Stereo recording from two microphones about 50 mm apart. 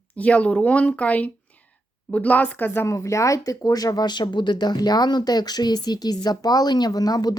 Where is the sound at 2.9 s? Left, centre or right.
Left.